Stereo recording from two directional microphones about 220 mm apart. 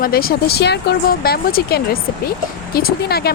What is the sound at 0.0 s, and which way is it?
A woman's voice, 40° left (ahead or behind).